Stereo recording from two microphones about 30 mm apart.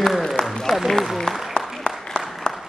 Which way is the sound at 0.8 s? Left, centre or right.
Centre.